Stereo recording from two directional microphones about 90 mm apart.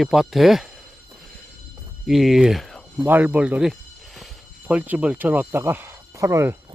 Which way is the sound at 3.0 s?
20° right (ahead or behind).